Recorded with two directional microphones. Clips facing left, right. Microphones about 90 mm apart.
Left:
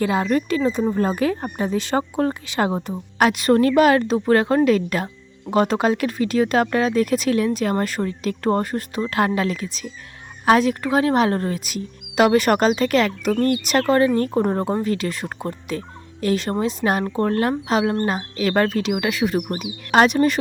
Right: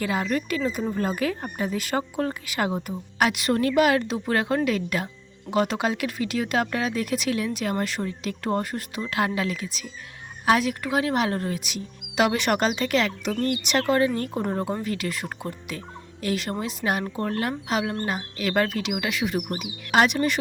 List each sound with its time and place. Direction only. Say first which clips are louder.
0.0 s speech: left 6 dB; 35° left (ahead or behind)
2.9 s speech: left 5 dB; 40° left (ahead or behind)